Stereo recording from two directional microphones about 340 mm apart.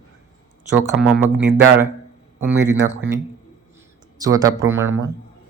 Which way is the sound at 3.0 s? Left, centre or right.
Centre.